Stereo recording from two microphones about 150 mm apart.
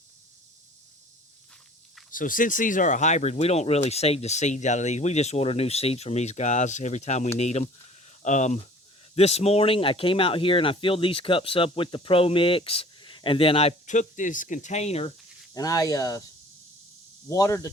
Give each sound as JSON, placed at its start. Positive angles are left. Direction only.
{"t": 2.0, "sound": "speech", "side_deg": 65}
{"t": 15.5, "sound": "speech", "side_deg": 25}
{"t": 17.2, "sound": "speech", "side_deg": 20}